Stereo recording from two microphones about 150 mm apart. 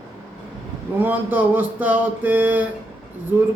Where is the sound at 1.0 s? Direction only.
10° right (ahead or behind).